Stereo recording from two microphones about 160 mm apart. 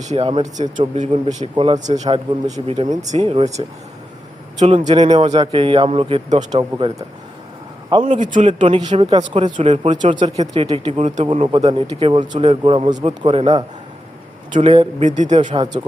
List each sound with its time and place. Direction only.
0.0 s speech: 40° right (ahead or behind)
0.5 s speech: 50° right (ahead or behind)
1.5 s speech: 35° right (ahead or behind)
1.8 s speech: 45° right (ahead or behind)
4.9 s a man's voice: 30° right (ahead or behind)
8.1 s speech: 50° right (ahead or behind)
8.5 s speech: 30° right (ahead or behind)
15.0 s speech: 50° right (ahead or behind)
15.5 s speech: 30° right (ahead or behind)